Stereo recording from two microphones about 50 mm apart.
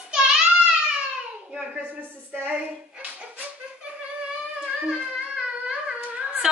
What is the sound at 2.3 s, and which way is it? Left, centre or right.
Music, right.